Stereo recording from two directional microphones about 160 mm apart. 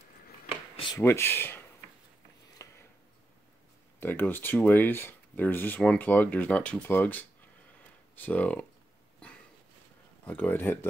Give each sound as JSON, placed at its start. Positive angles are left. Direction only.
{"t": 0.9, "sound": "speech", "side_deg": 15}
{"t": 2.6, "sound": "a sound", "side_deg": 20}
{"t": 4.0, "sound": "speech", "side_deg": 10}
{"t": 10.2, "sound": "speech", "side_deg": 10}